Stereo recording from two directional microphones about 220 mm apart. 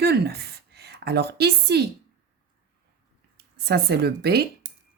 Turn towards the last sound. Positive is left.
turn(degrees=-45)  # may be behind; listen again after turning